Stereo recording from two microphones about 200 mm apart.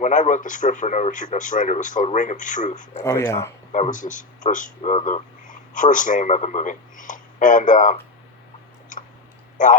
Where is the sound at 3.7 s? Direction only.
40° left (ahead or behind).